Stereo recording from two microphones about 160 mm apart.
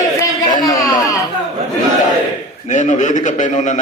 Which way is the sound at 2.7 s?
50° left (ahead or behind).